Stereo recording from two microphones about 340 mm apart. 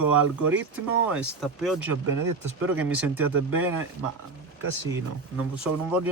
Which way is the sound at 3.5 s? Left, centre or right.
Right.